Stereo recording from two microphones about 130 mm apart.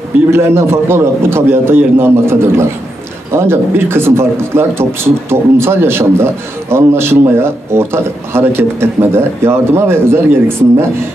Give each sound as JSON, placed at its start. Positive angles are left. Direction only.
{"t": 0.3, "sound": "a man's voice", "side_deg": -20}